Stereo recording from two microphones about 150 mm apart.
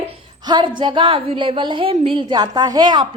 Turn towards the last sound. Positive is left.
turn(degrees=-30)  # may be behind; listen again after turning